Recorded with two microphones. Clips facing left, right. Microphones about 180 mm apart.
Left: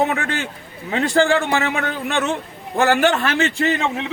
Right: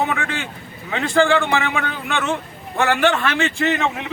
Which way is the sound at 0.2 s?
40° left (ahead or behind).